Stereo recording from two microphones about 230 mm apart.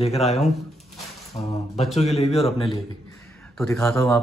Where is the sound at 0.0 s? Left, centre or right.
Left.